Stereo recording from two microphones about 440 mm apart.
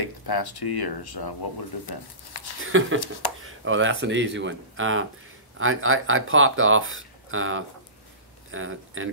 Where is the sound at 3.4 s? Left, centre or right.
Right.